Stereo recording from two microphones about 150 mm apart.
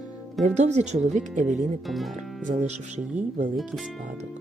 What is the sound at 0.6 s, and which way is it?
Speech, 50° right (ahead or behind).